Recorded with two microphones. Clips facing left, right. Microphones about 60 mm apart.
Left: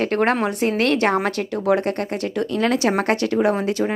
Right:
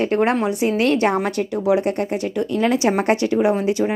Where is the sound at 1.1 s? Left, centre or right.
Centre.